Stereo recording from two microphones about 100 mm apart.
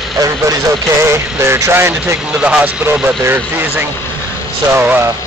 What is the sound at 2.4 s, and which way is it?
Speech, 10° right (ahead or behind).